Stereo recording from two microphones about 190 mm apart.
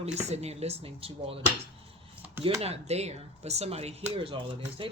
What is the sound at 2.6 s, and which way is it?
Speech, 30° right (ahead or behind).